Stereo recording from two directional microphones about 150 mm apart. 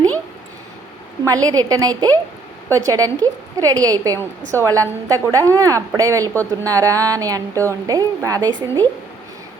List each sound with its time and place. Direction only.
1.2 s speech: 25° right (ahead or behind)